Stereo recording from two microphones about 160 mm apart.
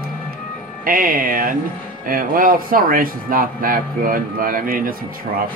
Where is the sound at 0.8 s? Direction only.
60° right (ahead or behind).